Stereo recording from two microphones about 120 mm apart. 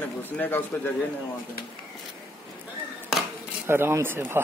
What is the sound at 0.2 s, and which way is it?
Speech, 15° left (ahead or behind).